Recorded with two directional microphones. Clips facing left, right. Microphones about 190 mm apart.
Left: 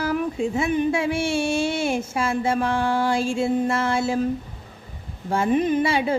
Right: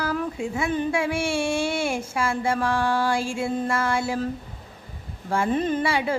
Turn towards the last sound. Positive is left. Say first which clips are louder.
# left 3 dB
turn(degrees=20)  # may be behind; listen again after turning